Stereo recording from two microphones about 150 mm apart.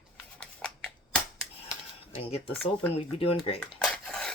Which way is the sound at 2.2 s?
45° left (ahead or behind).